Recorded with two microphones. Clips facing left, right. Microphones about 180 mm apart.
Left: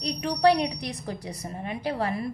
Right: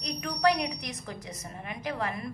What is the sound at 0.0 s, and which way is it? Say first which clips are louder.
A woman's voice: left 5 dB; 30° left (ahead or behind).